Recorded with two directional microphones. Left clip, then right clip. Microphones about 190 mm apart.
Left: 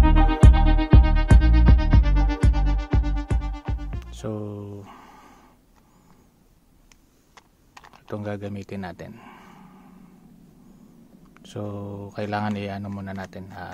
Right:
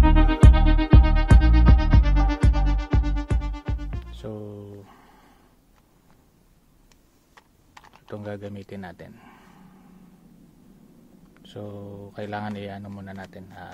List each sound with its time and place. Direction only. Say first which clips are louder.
0.0 s music: even; centre (ahead or behind)
4.0 s music: left 6 dB; 30° left (ahead or behind)
7.3 s typing: left 1 dB; 10° left (ahead or behind)
8.1 s a sound: left 3 dB; 25° left (ahead or behind)
11.3 s a man's voice: left 4 dB; 30° left (ahead or behind)